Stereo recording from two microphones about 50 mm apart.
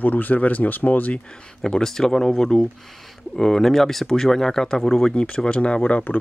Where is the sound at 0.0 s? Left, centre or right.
Left.